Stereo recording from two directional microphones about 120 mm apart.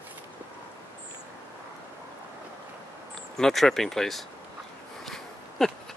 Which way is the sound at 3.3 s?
Centre (ahead or behind).